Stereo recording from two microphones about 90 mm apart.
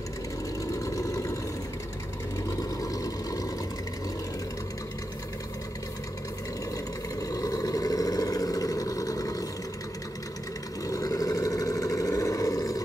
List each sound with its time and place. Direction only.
0.8 s vehicle: 35° left (ahead or behind)
2.5 s vehicle: 40° left (ahead or behind)
7.2 s vehicle: 40° left (ahead or behind)
10.9 s vehicle: 40° left (ahead or behind)